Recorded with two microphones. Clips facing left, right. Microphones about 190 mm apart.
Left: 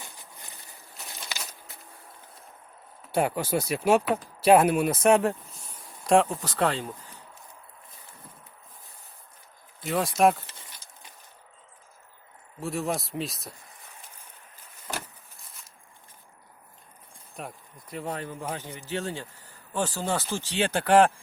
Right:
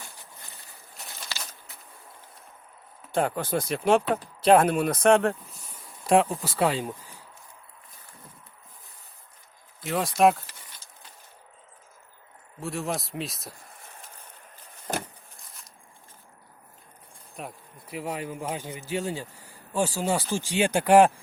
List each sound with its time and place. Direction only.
3.1 s speech: 10° left (ahead or behind)
6.1 s a man's voice: 5° right (ahead or behind)
9.8 s speech: centre (ahead or behind)
12.5 s speech: centre (ahead or behind)
14.9 s a sound: 50° right (ahead or behind)
15.4 s a sound: centre (ahead or behind)
17.3 s a man's voice: 5° right (ahead or behind)